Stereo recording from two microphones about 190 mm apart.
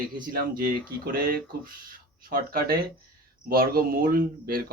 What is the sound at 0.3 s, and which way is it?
Speech, 50° right (ahead or behind).